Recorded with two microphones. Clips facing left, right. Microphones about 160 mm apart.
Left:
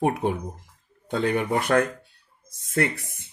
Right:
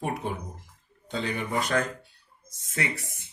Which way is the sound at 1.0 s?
55° left (ahead or behind).